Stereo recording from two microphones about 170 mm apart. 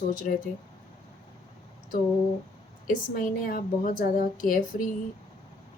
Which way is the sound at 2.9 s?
55° left (ahead or behind).